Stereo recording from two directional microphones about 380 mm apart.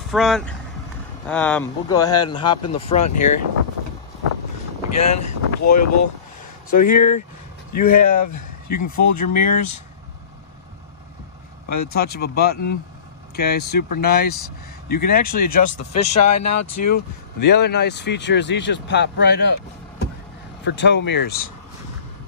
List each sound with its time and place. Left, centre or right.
0.1 s a man's voice: centre
3.0 s speech: left
4.8 s speech: left
8.6 s speech: left
8.9 s speech: left
11.7 s speech: left
16.2 s speech: left
17.6 s speech: left
20.6 s speech: left